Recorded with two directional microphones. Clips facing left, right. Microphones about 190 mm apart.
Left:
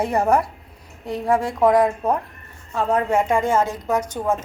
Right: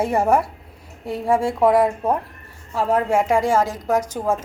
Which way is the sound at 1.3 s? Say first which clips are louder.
Right 1 dB; 25° right (ahead or behind).